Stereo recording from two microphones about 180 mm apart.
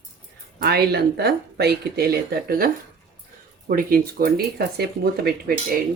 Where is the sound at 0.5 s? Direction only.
60° right (ahead or behind).